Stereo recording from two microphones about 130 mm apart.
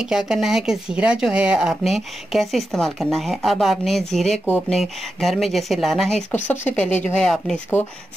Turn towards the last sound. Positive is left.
turn(degrees=5)  # may be behind; listen again after turning